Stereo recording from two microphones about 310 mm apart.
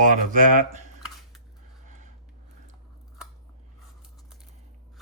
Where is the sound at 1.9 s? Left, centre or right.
Right.